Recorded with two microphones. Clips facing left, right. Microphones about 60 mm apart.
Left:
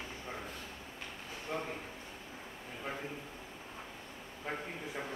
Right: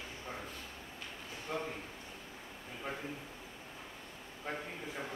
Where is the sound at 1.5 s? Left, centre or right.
Centre.